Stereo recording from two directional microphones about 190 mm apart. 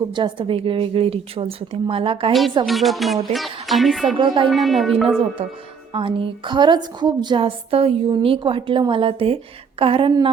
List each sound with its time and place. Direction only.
0.2 s a woman's voice: 25° right (ahead or behind)
2.6 s music: centre (ahead or behind)
5.9 s a woman's voice: 25° right (ahead or behind)